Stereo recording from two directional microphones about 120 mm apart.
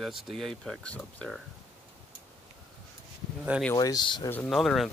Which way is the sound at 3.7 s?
35° left (ahead or behind).